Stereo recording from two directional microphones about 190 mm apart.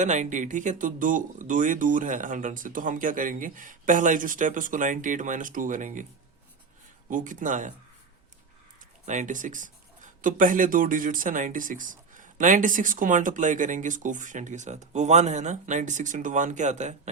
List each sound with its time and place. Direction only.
0.0 s speech: 40° right (ahead or behind)
7.1 s speech: 45° right (ahead or behind)
9.0 s speech: 40° right (ahead or behind)